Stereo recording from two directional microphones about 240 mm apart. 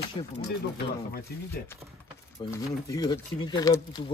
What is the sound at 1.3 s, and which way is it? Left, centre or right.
Speech, left.